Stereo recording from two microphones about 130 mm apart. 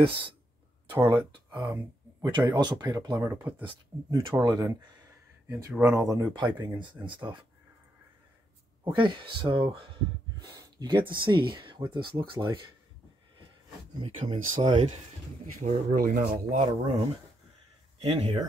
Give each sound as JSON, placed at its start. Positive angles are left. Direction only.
{"t": 0.0, "sound": "speech", "side_deg": -40}
{"t": 0.9, "sound": "speech", "side_deg": -20}
{"t": 1.3, "sound": "speech", "side_deg": -35}
{"t": 6.3, "sound": "speech", "side_deg": -35}
{"t": 8.8, "sound": "speech", "side_deg": -40}
{"t": 14.0, "sound": "speech", "side_deg": -50}
{"t": 15.6, "sound": "speech", "side_deg": -90}
{"t": 16.6, "sound": "speech", "side_deg": -45}
{"t": 18.0, "sound": "speech", "side_deg": -45}